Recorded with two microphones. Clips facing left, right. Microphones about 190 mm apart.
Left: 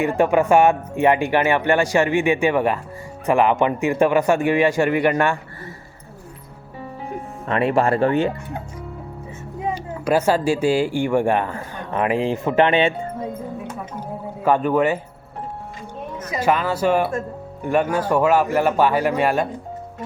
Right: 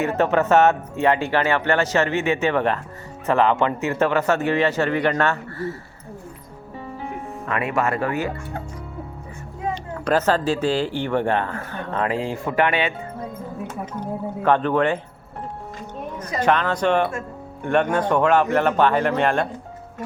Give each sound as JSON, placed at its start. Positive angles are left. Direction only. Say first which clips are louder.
{"t": 0.0, "sound": "speech", "louder": "left 2 dB", "side_deg": 10}
{"t": 7.4, "sound": "speech", "louder": "left 5 dB", "side_deg": 30}
{"t": 9.6, "sound": "speech", "louder": "left 1 dB", "side_deg": 10}
{"t": 14.0, "sound": "speech", "louder": "even", "side_deg": 10}
{"t": 16.3, "sound": "speech", "louder": "even", "side_deg": 5}